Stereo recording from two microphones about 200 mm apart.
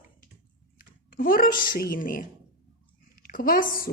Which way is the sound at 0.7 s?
45° left (ahead or behind).